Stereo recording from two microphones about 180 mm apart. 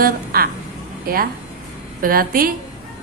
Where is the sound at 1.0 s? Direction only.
55° right (ahead or behind).